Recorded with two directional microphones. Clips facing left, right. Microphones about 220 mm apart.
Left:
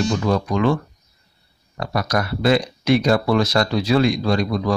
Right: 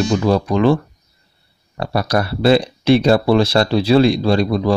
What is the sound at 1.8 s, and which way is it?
Speech, 30° right (ahead or behind).